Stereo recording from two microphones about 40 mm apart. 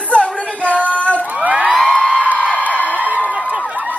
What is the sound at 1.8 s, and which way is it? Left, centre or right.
Music, left.